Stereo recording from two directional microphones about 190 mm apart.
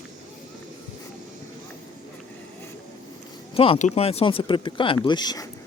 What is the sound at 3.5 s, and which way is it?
Speech, 30° left (ahead or behind).